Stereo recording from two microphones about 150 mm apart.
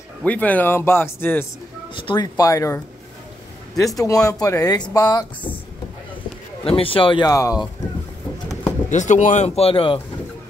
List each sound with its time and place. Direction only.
0.2 s speech: 10° left (ahead or behind)
2.0 s speech: 30° left (ahead or behind)
6.6 s a man's voice: 35° left (ahead or behind)
7.2 s speech: 20° left (ahead or behind)
8.9 s speech: 55° left (ahead or behind); by 10.0 s 35° left (ahead or behind)